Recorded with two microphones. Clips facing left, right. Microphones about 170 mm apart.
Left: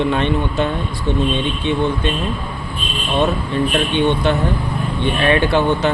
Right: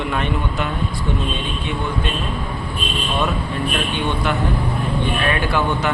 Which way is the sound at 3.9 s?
25° left (ahead or behind).